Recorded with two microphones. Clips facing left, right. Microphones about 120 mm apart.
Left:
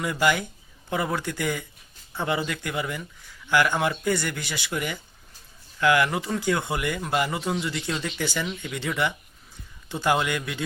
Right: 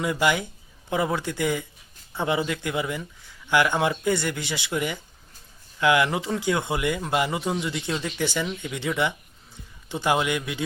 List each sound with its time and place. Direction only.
0.0 s speech: 20° right (ahead or behind)